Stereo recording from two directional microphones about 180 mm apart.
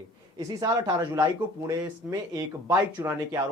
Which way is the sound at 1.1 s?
20° right (ahead or behind).